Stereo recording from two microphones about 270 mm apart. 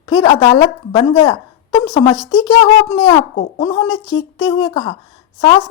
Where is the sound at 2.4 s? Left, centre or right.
Centre.